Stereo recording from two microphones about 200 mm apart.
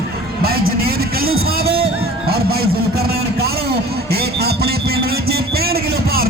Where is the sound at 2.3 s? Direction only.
50° right (ahead or behind).